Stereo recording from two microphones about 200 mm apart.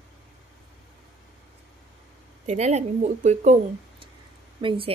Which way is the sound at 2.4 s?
35° right (ahead or behind).